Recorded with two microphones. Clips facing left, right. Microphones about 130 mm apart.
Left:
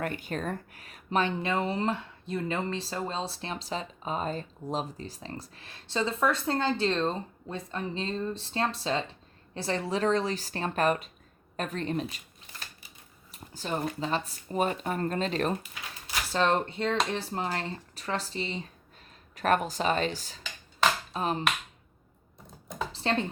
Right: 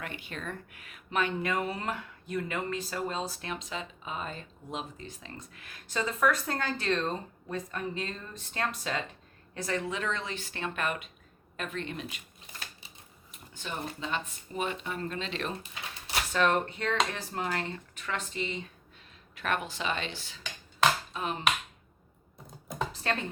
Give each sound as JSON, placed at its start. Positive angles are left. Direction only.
{"t": 0.0, "sound": "speech", "side_deg": 45}
{"t": 13.3, "sound": "a sound", "side_deg": 35}
{"t": 14.0, "sound": "speech", "side_deg": 35}
{"t": 16.3, "sound": "speech", "side_deg": 30}
{"t": 22.4, "sound": "computer keyboard", "side_deg": 0}